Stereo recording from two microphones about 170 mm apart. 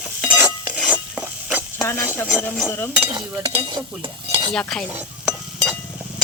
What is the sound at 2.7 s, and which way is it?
Speech, 10° left (ahead or behind).